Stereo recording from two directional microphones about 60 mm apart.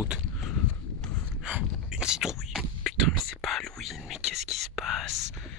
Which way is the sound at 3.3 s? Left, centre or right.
Centre.